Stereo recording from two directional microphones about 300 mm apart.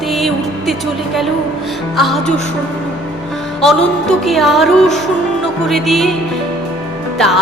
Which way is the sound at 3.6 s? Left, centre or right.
Centre.